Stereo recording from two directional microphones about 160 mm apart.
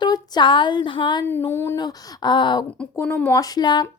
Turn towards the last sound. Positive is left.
turn(degrees=25)  # may be behind; listen again after turning